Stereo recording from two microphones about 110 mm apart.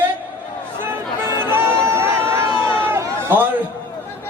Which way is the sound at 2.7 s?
20° right (ahead or behind).